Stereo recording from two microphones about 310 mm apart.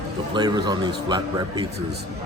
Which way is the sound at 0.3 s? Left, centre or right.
Centre.